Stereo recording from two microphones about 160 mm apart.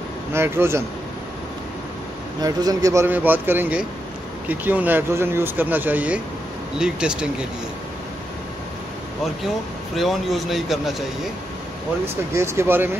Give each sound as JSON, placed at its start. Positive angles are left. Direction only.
{"t": 0.3, "sound": "speech", "side_deg": -15}
{"t": 2.4, "sound": "a man's voice", "side_deg": -25}
{"t": 9.9, "sound": "a man's voice", "side_deg": 0}
{"t": 12.4, "sound": "speech", "side_deg": -15}